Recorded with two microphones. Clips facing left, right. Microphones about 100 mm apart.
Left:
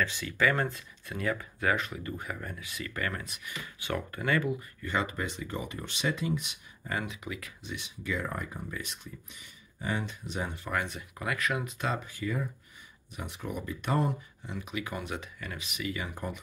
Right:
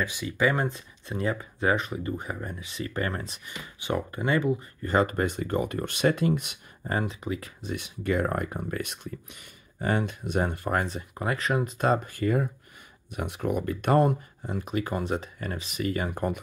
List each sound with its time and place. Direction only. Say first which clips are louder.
0.0 s speech: right 2 dB; 15° right (ahead or behind)
4.8 s speech: right 8 dB; 45° right (ahead or behind)
6.8 s speech: right 6 dB; 35° right (ahead or behind)
7.7 s speech: right 8 dB; 55° right (ahead or behind)